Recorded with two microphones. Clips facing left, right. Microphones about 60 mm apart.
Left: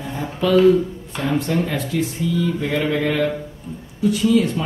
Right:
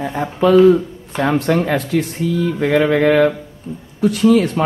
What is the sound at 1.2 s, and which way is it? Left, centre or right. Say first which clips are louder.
Speech: right 5 dB; right.